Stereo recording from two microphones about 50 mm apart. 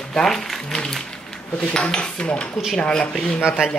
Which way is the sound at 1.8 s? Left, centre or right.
Centre.